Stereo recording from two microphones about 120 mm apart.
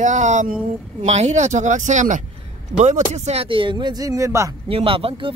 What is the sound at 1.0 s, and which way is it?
Speech, 70° right (ahead or behind).